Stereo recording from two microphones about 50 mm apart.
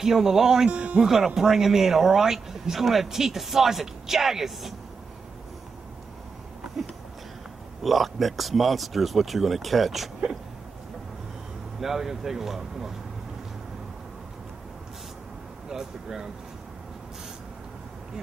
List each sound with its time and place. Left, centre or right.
0.0 s speech: centre
0.7 s speech: right
1.0 s speech: centre
7.8 s speech: centre
11.8 s speech: centre
15.7 s speech: centre